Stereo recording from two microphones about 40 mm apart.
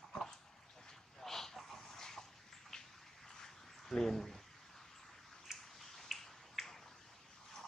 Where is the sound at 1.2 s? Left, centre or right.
Centre.